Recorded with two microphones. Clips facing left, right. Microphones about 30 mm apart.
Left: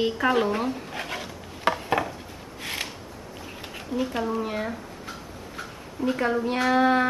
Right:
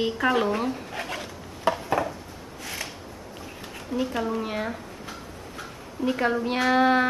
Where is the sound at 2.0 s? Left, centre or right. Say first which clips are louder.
Right 1 dB; left.